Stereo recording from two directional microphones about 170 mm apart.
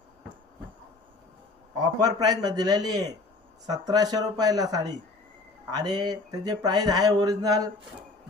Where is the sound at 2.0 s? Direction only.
20° right (ahead or behind).